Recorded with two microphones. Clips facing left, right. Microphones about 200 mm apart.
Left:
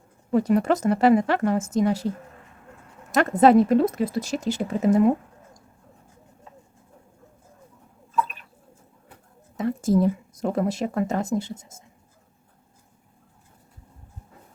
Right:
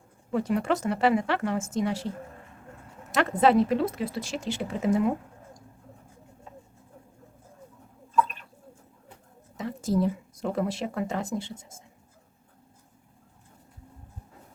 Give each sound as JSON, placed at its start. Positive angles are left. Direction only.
{"t": 0.3, "sound": "a woman's voice", "side_deg": 45}
{"t": 3.1, "sound": "speech", "side_deg": 45}
{"t": 9.6, "sound": "speech", "side_deg": 50}